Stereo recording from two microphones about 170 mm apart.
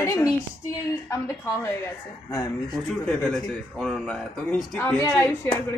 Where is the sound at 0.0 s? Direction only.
15° left (ahead or behind).